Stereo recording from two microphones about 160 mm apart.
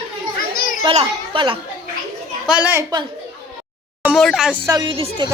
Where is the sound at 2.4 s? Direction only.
10° right (ahead or behind).